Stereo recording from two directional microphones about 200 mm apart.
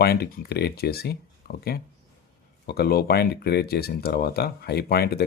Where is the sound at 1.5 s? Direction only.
50° left (ahead or behind).